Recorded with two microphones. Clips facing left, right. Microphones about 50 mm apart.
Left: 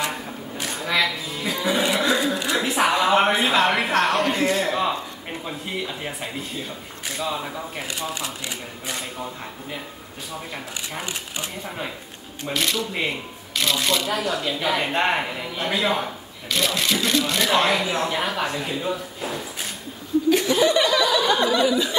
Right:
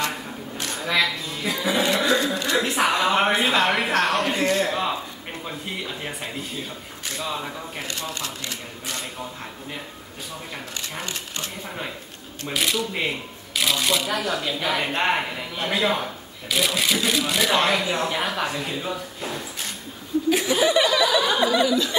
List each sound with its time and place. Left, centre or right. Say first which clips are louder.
0.0 s a sound: even; centre
2.5 s music: even; centre
5.5 s speech: left 2 dB; centre
11.0 s speech: left 1 dB; centre
12.4 s speech: even; centre
20.2 s laughter: left 2 dB; centre
21.6 s speech: left 1 dB; centre